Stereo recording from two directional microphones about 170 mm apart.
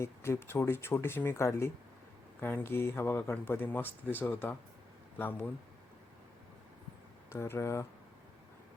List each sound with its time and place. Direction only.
0.0 s speech: 15° left (ahead or behind)
7.3 s speech: 15° left (ahead or behind)